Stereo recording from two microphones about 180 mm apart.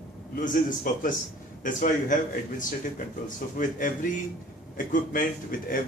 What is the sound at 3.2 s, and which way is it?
A man's voice, 45° left (ahead or behind).